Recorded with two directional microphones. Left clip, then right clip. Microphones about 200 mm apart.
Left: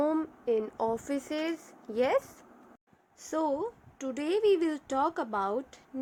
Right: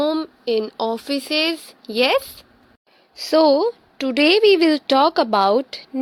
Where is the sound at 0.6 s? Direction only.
40° right (ahead or behind).